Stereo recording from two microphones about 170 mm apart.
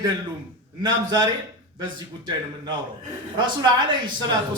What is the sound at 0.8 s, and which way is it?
Speech, 25° right (ahead or behind).